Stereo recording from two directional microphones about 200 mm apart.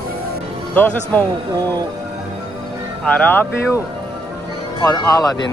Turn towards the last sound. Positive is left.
turn(degrees=15)  # may be behind; listen again after turning